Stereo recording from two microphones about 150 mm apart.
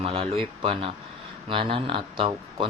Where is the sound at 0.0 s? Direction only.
40° right (ahead or behind).